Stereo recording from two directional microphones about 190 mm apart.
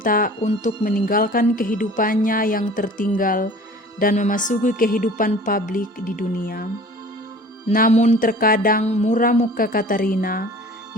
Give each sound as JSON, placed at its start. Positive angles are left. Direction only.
{"t": 0.0, "sound": "speech", "side_deg": 50}
{"t": 7.7, "sound": "speech", "side_deg": 45}
{"t": 8.8, "sound": "speech", "side_deg": 35}